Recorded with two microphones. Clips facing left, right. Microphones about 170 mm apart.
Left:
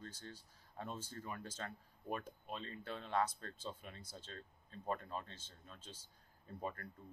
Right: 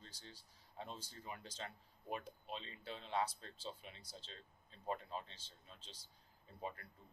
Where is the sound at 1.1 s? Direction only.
50° left (ahead or behind).